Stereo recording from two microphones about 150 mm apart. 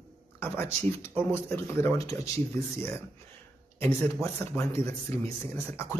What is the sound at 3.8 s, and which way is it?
Speech, 15° left (ahead or behind).